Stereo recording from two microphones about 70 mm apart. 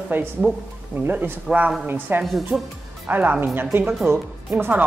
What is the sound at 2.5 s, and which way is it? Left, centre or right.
Speech, centre.